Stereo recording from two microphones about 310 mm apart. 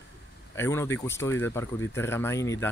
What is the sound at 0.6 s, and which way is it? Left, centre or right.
Speech, centre.